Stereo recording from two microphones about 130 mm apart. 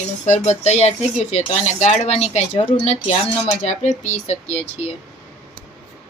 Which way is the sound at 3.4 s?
65° left (ahead or behind).